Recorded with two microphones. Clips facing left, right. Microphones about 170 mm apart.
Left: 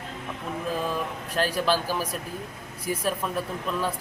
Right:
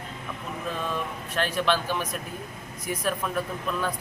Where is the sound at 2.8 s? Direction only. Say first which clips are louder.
Left 1 dB; 30° left (ahead or behind).